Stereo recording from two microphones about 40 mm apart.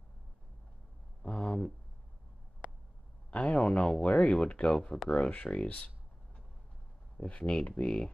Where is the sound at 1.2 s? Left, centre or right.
Left.